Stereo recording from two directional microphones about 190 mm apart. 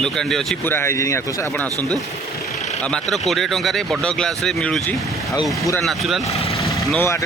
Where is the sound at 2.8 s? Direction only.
5° left (ahead or behind).